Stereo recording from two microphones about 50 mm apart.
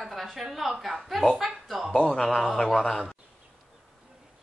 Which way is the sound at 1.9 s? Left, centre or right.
Centre.